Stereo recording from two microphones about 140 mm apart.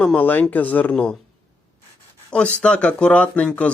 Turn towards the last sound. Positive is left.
turn(degrees=10)  # may be behind; listen again after turning